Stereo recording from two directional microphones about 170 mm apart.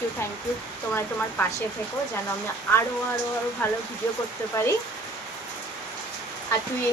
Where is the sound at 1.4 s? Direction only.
15° left (ahead or behind).